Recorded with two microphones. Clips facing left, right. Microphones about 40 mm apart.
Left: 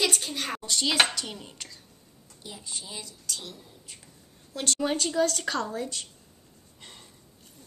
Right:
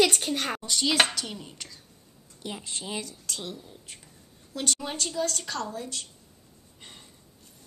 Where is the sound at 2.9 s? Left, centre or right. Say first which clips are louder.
Right 4 dB; right.